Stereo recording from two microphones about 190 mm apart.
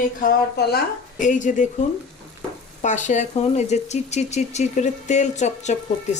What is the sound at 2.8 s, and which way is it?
Speech, 40° left (ahead or behind).